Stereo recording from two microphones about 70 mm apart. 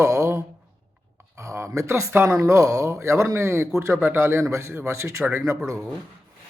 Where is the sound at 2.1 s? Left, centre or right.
Right.